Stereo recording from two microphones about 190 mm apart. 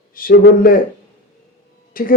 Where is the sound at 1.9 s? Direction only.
50° left (ahead or behind).